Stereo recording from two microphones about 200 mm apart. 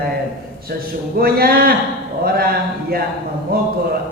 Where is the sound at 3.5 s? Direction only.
50° right (ahead or behind).